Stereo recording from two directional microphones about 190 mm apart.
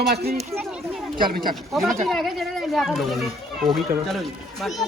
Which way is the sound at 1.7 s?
Centre (ahead or behind).